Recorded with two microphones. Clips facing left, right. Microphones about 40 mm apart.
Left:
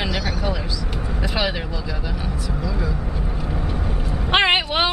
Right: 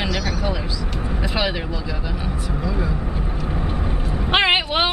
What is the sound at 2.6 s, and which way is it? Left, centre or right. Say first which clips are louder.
Vehicle: right 3 dB; right.